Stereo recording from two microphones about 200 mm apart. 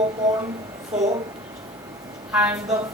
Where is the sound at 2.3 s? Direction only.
5° right (ahead or behind).